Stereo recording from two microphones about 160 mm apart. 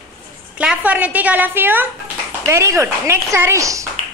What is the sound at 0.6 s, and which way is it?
A woman's voice, 10° right (ahead or behind).